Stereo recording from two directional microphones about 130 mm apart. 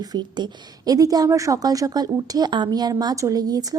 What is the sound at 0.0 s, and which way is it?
A woman's voice, 35° right (ahead or behind).